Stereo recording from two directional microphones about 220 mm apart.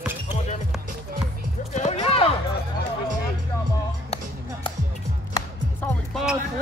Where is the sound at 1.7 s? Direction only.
30° left (ahead or behind).